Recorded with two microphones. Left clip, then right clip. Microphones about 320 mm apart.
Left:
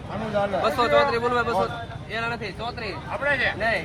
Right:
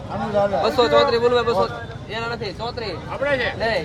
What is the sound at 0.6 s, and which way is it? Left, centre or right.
Speech, right.